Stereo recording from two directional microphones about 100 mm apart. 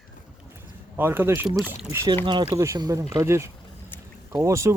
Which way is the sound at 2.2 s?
50° right (ahead or behind).